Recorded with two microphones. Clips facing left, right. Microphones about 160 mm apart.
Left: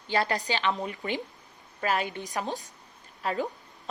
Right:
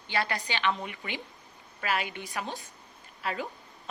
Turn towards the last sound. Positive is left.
turn(degrees=40)  # may be behind; listen again after turning